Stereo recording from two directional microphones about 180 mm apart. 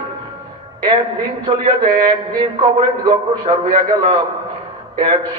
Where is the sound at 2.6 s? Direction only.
30° right (ahead or behind).